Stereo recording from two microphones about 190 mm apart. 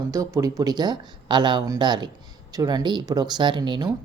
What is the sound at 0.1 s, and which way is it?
Speech, 15° right (ahead or behind).